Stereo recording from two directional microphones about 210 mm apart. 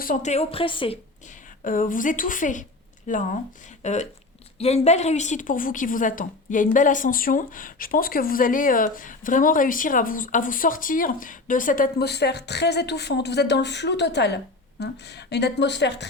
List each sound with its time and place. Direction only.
0.0 s a woman's voice: 40° left (ahead or behind)
1.6 s a woman's voice: 40° left (ahead or behind); by 16.0 s 55° left (ahead or behind)